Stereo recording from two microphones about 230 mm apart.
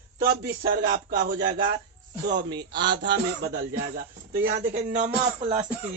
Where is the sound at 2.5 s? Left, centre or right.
Centre.